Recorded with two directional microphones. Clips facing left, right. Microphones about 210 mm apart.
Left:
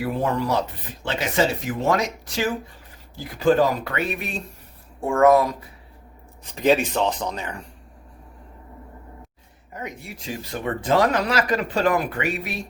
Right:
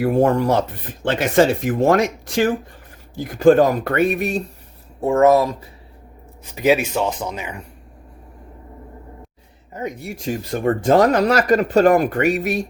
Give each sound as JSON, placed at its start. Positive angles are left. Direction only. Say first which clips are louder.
{"t": 0.0, "sound": "speech", "louder": "right 8 dB", "side_deg": -50}
{"t": 5.0, "sound": "speech", "louder": "right 3 dB", "side_deg": -25}
{"t": 6.5, "sound": "speech", "louder": "right 2 dB", "side_deg": -5}
{"t": 10.0, "sound": "speech", "louder": "right 8 dB", "side_deg": -45}